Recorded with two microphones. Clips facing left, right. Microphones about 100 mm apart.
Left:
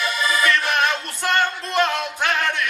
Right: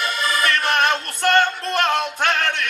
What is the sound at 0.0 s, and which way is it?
Music, 55° right (ahead or behind).